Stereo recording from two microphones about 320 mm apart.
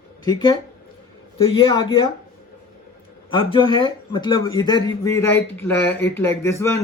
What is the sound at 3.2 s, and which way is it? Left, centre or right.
A man's voice, centre.